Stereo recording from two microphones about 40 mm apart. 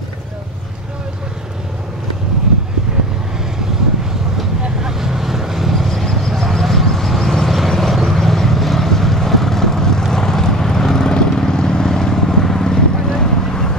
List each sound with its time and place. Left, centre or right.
2.9 s vehicle: centre
4.4 s vehicle: centre